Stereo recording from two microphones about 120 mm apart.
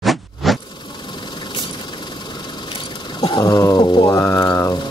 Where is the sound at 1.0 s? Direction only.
40° left (ahead or behind).